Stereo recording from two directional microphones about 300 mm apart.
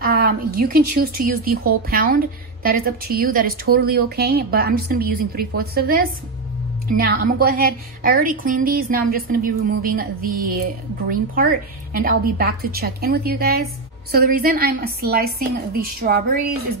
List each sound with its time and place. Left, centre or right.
0.0 s a woman's voice: right